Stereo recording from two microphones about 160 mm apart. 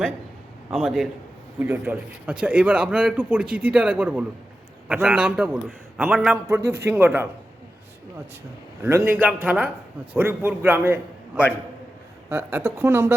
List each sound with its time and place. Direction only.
0.7 s a man's voice: centre (ahead or behind)
8.8 s a man's voice: 15° right (ahead or behind)